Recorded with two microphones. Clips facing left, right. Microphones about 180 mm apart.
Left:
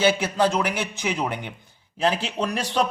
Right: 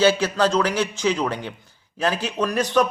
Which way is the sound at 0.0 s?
20° left (ahead or behind).